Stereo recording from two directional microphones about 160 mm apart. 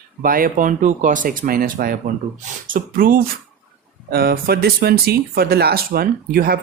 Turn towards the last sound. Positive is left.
turn(degrees=-65)  # may be behind; listen again after turning